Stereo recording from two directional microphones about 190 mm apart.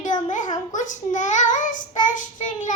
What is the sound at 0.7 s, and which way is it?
Child singing, 40° left (ahead or behind).